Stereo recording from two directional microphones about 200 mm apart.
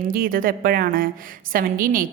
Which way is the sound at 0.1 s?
45° right (ahead or behind).